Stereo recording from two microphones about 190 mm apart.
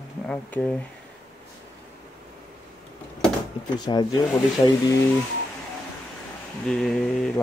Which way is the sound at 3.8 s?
20° left (ahead or behind).